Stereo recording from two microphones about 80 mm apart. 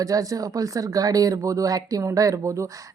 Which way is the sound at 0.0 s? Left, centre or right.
Right.